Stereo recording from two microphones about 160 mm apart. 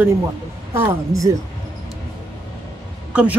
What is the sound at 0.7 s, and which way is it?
Speech, 15° right (ahead or behind).